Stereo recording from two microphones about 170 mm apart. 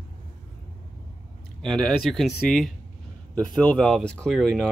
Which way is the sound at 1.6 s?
Centre (ahead or behind).